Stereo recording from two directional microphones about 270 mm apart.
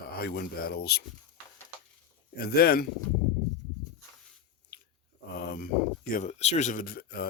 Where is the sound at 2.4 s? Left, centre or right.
Left.